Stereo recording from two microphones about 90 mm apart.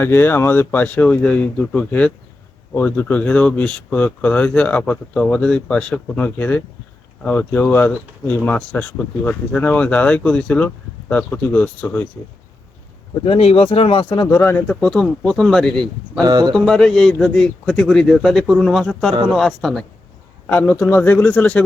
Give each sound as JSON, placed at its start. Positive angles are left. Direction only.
{"t": 0.0, "sound": "speech", "side_deg": 25}
{"t": 13.2, "sound": "speech", "side_deg": 90}
{"t": 14.3, "sound": "speech", "side_deg": 30}
{"t": 14.7, "sound": "speech", "side_deg": 10}
{"t": 16.2, "sound": "speech", "side_deg": -50}
{"t": 16.6, "sound": "a man's voice", "side_deg": 5}
{"t": 20.5, "sound": "speech", "side_deg": 20}